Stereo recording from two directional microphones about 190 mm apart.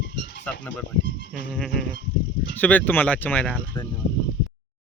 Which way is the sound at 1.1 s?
70° left (ahead or behind).